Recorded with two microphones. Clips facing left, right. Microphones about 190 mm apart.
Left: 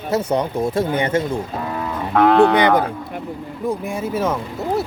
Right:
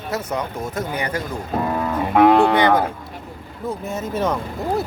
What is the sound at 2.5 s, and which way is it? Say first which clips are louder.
Speech: left 1 dB; 20° left (ahead or behind).